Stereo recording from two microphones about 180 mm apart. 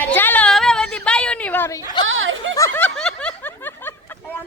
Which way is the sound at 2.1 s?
90° right.